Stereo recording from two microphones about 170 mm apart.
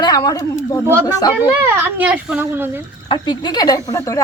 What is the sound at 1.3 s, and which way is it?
A woman's voice, 10° right (ahead or behind).